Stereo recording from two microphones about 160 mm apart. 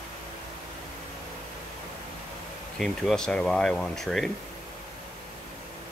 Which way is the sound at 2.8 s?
5° left (ahead or behind).